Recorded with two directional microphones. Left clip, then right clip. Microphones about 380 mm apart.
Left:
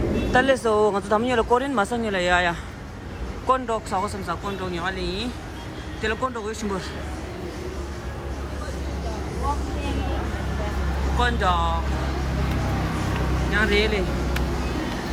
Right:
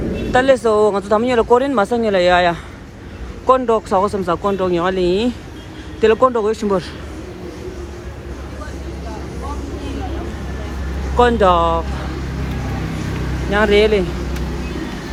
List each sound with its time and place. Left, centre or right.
0.3 s speech: centre
11.2 s speech: centre
13.5 s speech: centre